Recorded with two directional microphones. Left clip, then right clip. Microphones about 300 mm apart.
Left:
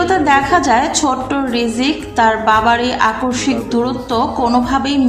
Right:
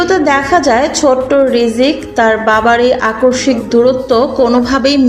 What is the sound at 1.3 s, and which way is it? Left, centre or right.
A woman's voice, left.